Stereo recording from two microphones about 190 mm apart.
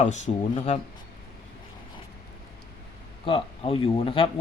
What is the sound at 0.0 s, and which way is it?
Speech, 35° left (ahead or behind).